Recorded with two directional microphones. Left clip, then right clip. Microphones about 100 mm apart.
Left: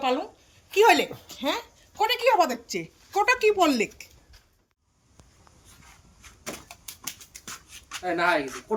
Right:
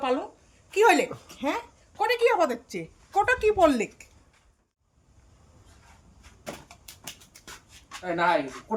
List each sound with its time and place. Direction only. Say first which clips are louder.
0.7 s speech: left 1 dB; 25° right (ahead or behind)
7.4 s a sound: left 4 dB; 15° left (ahead or behind)
8.0 s speech: even; 30° right (ahead or behind)